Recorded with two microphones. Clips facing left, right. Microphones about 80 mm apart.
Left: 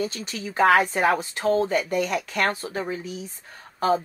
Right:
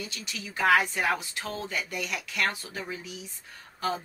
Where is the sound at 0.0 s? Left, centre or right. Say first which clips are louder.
Left 10 dB; left.